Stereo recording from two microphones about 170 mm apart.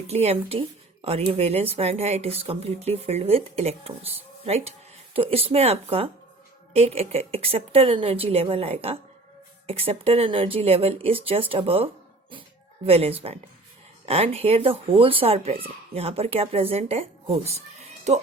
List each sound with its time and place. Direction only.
0.1 s speech: 40° right (ahead or behind)